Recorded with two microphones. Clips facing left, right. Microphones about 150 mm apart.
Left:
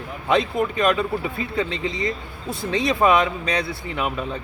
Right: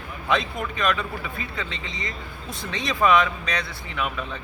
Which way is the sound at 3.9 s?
35° left (ahead or behind).